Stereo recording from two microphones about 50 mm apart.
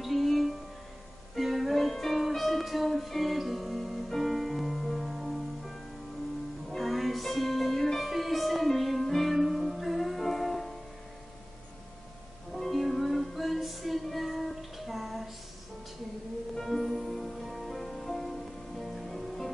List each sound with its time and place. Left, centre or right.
0.0 s music: centre
12.5 s music: centre
16.5 s music: centre